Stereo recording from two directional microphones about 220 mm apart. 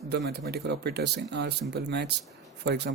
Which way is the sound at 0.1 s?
50° right (ahead or behind).